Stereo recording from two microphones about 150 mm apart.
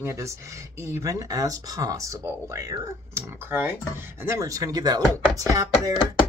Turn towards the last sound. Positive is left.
turn(degrees=-25)  # may be behind; listen again after turning